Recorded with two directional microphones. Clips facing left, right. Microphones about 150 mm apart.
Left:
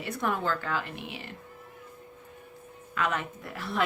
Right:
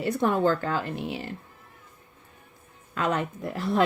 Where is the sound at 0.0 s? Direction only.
30° right (ahead or behind).